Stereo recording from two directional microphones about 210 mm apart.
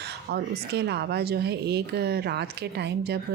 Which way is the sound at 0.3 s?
50° right (ahead or behind).